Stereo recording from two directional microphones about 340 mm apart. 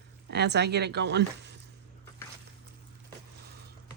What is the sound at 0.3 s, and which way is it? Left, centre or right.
Speech, right.